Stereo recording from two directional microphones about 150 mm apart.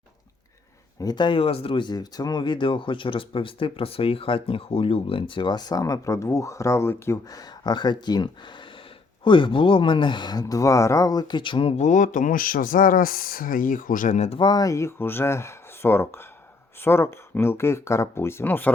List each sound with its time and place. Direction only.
1.0 s speech: 30° left (ahead or behind)
11.8 s speech: 55° left (ahead or behind)
14.3 s speech: 25° left (ahead or behind)